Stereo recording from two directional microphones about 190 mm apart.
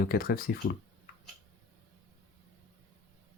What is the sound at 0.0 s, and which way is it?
Speech, 50° left (ahead or behind).